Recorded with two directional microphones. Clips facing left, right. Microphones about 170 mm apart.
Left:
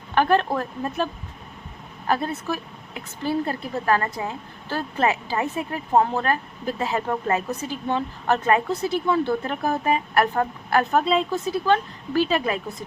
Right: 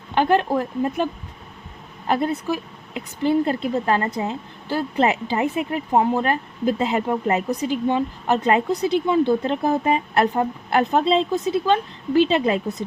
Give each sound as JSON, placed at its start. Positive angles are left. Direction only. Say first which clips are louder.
{"t": 0.1, "sound": "speech", "louder": "right 1 dB", "side_deg": -20}